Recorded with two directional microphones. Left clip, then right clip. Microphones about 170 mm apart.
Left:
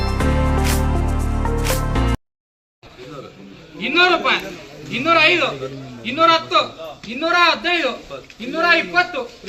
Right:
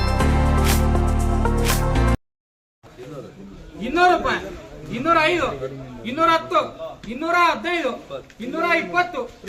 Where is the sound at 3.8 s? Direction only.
25° right (ahead or behind).